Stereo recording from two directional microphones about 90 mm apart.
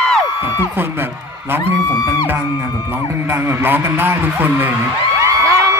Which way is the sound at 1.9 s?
40° left (ahead or behind).